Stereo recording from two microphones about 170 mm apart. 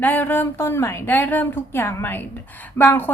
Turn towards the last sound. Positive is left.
turn(degrees=10)  # may be behind; listen again after turning